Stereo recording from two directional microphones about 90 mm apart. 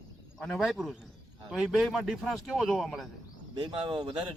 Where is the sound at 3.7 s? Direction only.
70° right (ahead or behind).